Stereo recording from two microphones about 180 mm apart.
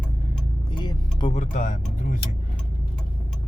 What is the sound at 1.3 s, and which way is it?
Speech, 45° left (ahead or behind).